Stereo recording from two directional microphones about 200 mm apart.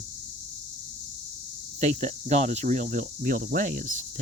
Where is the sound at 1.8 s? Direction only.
35° right (ahead or behind).